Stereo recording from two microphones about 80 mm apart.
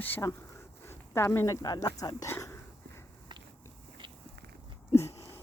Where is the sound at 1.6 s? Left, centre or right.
Left.